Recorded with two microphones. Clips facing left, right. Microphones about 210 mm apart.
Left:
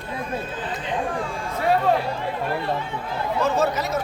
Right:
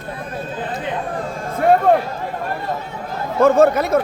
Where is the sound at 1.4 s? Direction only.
50° right (ahead or behind).